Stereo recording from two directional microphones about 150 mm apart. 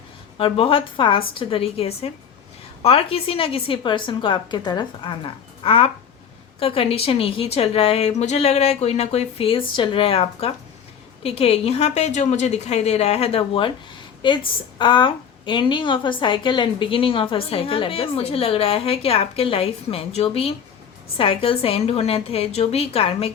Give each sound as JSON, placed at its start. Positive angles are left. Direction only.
{"t": 0.3, "sound": "a woman's voice", "side_deg": 40}